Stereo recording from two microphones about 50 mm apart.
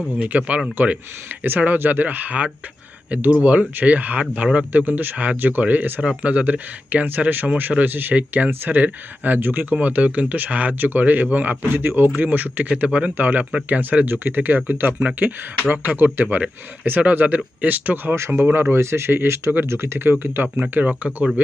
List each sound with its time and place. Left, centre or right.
0.2 s speech: right
0.8 s speech: right
6.0 s speech: right
13.4 s speech: centre
13.7 s speech: right
14.9 s speech: right
15.7 s speech: right
19.6 s speech: right